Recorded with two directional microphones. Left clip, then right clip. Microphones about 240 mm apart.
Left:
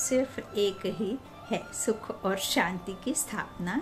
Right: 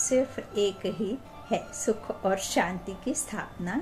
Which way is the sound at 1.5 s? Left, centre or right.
Centre.